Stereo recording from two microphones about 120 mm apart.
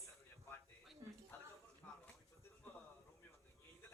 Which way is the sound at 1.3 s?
15° left (ahead or behind).